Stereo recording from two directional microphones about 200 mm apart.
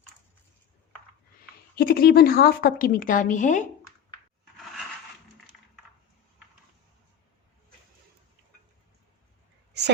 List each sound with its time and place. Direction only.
1.8 s a woman's voice: 50° left (ahead or behind)